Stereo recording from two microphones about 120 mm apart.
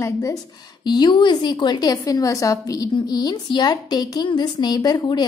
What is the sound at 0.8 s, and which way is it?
Speech, 35° left (ahead or behind).